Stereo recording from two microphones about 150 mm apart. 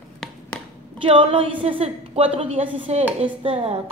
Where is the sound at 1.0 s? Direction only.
40° right (ahead or behind).